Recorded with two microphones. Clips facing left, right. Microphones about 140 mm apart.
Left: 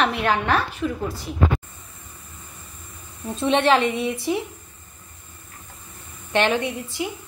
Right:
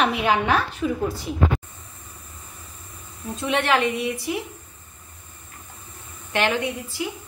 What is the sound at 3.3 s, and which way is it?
A woman's voice, 25° left (ahead or behind).